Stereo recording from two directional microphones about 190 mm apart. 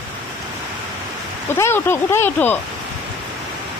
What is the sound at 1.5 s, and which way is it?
Speech, 10° left (ahead or behind).